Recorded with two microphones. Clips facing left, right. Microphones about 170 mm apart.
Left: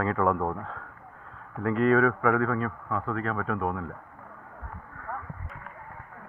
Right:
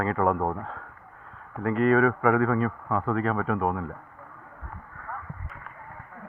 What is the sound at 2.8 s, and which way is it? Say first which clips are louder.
Speech: right 4 dB; 55° right (ahead or behind).